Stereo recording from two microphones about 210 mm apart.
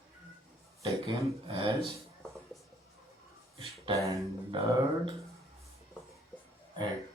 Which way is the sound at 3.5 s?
25° right (ahead or behind).